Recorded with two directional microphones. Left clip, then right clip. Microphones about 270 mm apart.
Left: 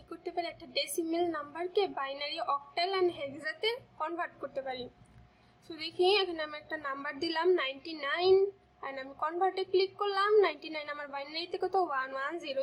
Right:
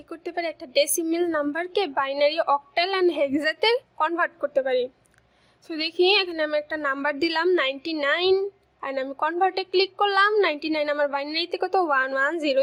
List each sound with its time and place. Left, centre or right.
0.1 s a woman's voice: right